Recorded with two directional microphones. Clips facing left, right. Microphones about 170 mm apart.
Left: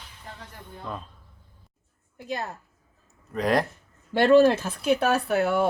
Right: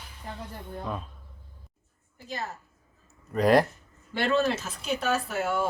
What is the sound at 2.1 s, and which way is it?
Speech, 60° left (ahead or behind).